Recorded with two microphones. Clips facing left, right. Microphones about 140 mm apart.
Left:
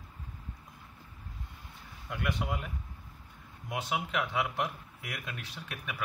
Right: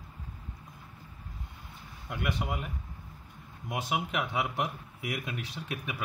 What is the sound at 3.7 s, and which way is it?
A man's voice, 10° right (ahead or behind).